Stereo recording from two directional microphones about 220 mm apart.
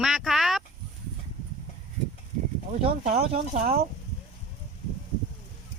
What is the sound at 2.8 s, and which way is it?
Speech, 25° right (ahead or behind).